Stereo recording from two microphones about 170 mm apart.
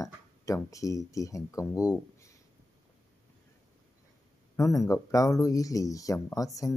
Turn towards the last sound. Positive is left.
turn(degrees=20)  # may be behind; listen again after turning